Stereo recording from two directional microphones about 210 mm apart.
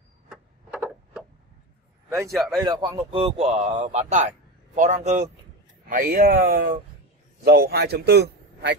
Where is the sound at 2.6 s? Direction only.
20° right (ahead or behind); by 8.7 s 50° right (ahead or behind).